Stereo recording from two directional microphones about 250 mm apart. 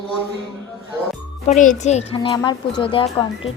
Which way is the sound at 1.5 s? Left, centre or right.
Left.